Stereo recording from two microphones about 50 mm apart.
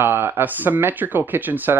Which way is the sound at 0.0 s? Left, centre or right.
Right.